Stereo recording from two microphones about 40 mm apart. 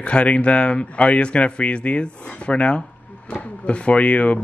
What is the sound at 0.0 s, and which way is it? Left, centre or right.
Speech, left.